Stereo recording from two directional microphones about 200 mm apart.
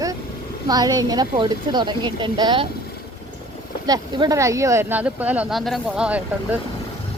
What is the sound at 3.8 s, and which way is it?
A woman's voice, 20° right (ahead or behind).